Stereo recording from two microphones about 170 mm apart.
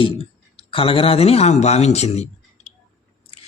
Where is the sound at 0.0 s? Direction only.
30° left (ahead or behind).